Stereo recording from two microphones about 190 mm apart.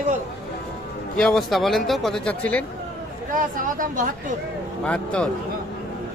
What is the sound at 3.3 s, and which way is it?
Speech, 45° right (ahead or behind).